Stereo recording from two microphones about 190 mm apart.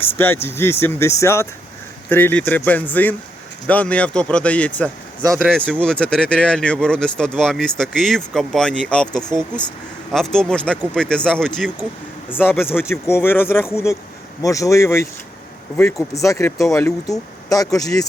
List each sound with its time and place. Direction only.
0.4 s speech: 15° left (ahead or behind)